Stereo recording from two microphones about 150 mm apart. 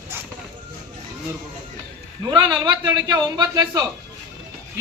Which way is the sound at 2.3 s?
35° right (ahead or behind).